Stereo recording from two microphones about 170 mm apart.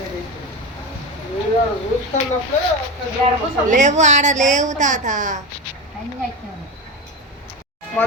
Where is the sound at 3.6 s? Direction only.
45° right (ahead or behind).